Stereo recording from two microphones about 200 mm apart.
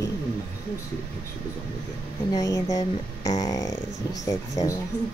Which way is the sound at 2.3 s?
15° left (ahead or behind).